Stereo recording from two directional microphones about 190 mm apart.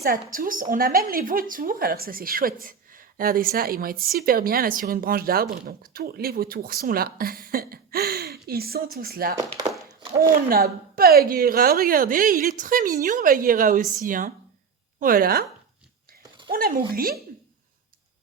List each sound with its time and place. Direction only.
0.0 s a woman's voice: 50° right (ahead or behind)
9.4 s a sound: 20° right (ahead or behind)
10.2 s a woman's voice: 50° right (ahead or behind)
16.5 s a woman's voice: 50° right (ahead or behind)